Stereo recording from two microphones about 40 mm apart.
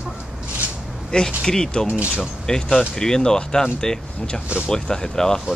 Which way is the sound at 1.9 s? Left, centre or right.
Right.